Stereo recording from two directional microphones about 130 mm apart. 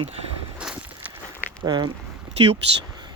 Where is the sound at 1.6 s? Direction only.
35° right (ahead or behind).